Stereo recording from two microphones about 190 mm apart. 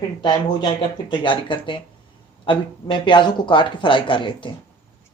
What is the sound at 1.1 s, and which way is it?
Speech, 25° left (ahead or behind).